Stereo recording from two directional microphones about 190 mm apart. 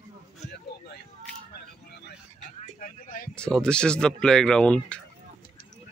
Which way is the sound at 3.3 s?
5° left (ahead or behind).